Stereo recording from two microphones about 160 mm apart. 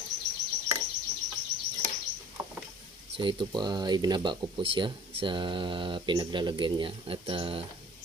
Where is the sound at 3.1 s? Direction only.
30° right (ahead or behind).